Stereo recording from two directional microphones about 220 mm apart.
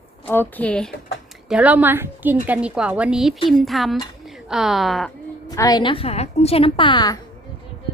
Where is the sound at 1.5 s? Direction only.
5° right (ahead or behind).